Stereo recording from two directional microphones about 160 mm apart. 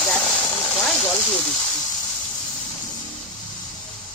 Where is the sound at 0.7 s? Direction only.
5° left (ahead or behind).